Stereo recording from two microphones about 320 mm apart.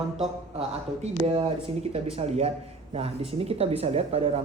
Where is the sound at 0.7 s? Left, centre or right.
Centre.